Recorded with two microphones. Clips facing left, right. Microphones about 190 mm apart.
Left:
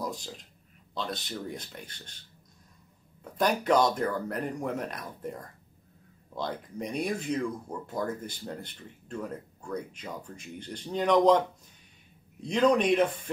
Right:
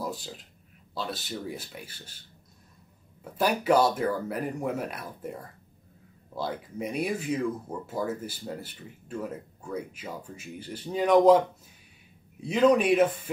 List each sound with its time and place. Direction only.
0.0 s a sound: 5° right (ahead or behind)
0.9 s speech: 5° right (ahead or behind)
3.3 s speech: 5° right (ahead or behind)